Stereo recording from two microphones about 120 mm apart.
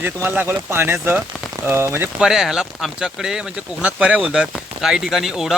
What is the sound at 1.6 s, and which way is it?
Rain on surface, 20° right (ahead or behind).